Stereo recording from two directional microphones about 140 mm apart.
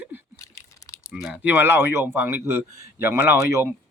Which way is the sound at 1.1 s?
5° right (ahead or behind).